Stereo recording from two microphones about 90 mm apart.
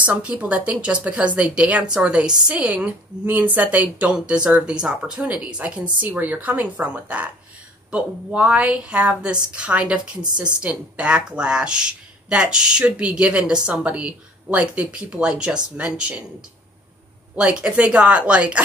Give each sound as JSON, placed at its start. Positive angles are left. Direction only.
{"t": 0.0, "sound": "speech", "side_deg": -15}
{"t": 17.4, "sound": "speech", "side_deg": -10}